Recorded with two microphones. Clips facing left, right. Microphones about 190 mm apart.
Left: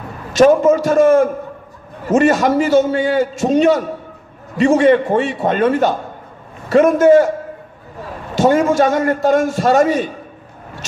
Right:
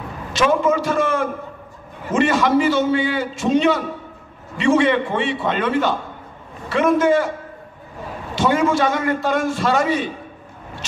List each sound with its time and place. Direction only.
0.3 s a man's voice: 45° left (ahead or behind)
8.4 s a man's voice: 45° left (ahead or behind)